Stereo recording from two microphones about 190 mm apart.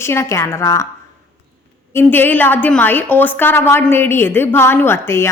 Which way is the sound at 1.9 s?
10° left (ahead or behind).